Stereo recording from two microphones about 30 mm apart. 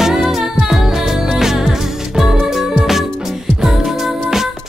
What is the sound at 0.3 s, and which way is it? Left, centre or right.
Music, centre.